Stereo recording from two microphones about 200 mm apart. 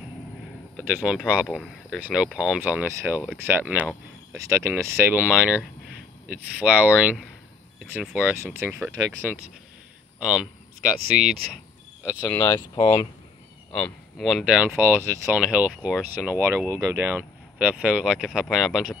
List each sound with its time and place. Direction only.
0.7 s speech: 5° right (ahead or behind)
12.0 s speech: 15° left (ahead or behind)
13.7 s speech: centre (ahead or behind)